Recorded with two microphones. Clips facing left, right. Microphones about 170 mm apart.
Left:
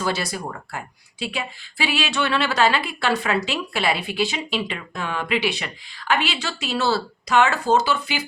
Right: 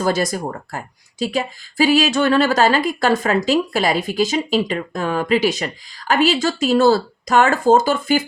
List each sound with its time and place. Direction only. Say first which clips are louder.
0.0 s a woman's voice: right 6 dB; 45° right (ahead or behind)